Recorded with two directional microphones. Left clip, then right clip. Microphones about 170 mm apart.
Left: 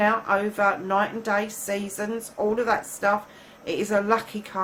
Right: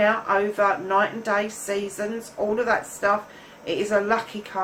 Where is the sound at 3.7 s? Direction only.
50° left (ahead or behind).